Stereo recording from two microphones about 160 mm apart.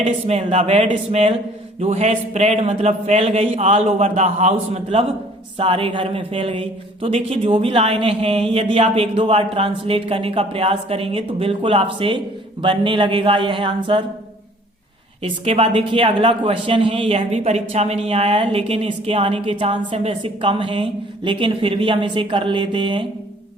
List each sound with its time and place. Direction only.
0.0 s speech: 45° right (ahead or behind)
15.2 s speech: 35° right (ahead or behind)